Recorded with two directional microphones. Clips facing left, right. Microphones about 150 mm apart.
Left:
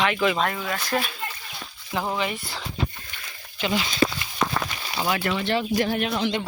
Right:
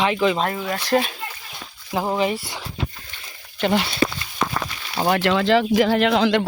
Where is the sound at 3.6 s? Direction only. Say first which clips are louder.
Right 5 dB; 60° right (ahead or behind).